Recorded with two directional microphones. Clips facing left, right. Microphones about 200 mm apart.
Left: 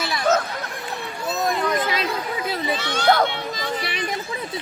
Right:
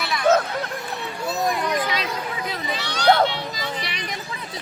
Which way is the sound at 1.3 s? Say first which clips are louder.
Even; 15° right (ahead or behind).